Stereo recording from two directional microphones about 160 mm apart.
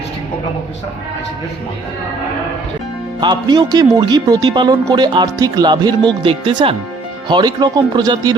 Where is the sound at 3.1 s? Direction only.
25° right (ahead or behind).